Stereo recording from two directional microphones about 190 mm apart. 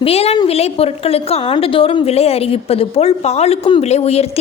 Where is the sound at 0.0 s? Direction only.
30° left (ahead or behind).